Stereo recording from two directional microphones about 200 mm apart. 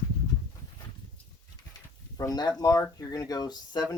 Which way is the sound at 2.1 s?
20° left (ahead or behind).